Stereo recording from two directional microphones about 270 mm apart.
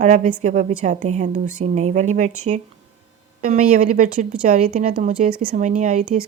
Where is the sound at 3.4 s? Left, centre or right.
Right.